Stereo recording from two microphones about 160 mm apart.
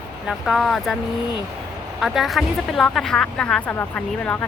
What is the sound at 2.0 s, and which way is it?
Speech, centre (ahead or behind).